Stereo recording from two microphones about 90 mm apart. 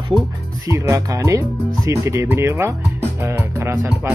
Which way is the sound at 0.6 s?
40° right (ahead or behind).